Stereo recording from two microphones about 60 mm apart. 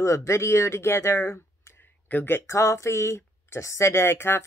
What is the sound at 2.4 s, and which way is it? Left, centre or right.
Speech, left.